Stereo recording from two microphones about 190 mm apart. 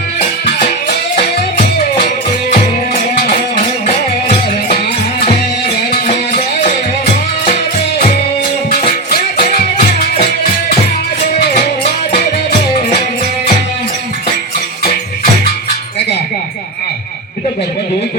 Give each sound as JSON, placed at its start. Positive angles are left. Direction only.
{"t": 8.7, "sound": "music", "side_deg": 50}